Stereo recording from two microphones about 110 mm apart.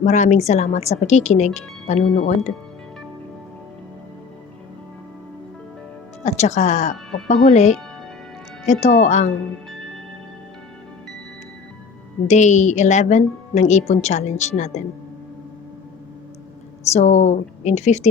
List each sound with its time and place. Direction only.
0.1 s speech: 90° left
6.2 s speech: 90° left
12.3 s speech: 90° left
16.9 s speech: 85° left